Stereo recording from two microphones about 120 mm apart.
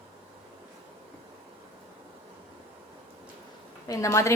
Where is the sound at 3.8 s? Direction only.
30° left (ahead or behind).